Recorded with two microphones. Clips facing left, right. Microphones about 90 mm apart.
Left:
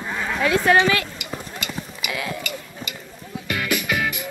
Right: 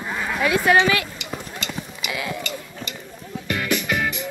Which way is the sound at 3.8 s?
90° left.